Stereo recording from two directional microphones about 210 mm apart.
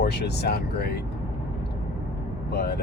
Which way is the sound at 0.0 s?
50° left (ahead or behind).